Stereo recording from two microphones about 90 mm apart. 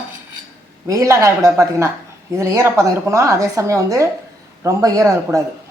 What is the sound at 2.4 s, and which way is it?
A woman's voice, 30° right (ahead or behind).